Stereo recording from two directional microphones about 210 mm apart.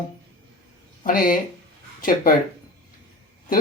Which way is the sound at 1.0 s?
40° left (ahead or behind).